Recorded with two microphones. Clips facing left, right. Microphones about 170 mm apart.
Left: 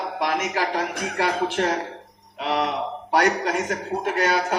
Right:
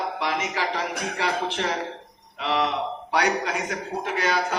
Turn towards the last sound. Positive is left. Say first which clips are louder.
# left 3 dB
turn(degrees=50)  # may be behind; listen again after turning